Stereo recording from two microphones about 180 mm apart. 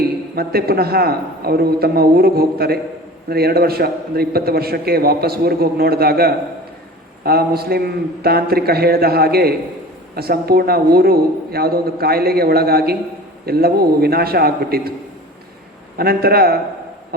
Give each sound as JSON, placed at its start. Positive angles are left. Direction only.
{"t": 0.3, "sound": "a man's voice", "side_deg": -60}
{"t": 16.0, "sound": "a man's voice", "side_deg": -60}